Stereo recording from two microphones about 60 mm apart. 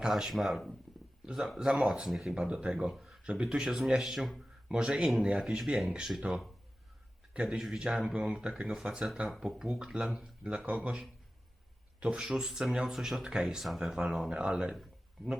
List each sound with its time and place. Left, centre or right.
0.0 s speech: centre
1.9 s speech: centre
2.9 s a sound: centre
3.2 s speech: centre
7.5 s speech: centre
14.8 s a sound: centre